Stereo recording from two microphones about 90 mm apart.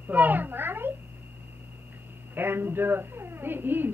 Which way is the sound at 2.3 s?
25° right (ahead or behind).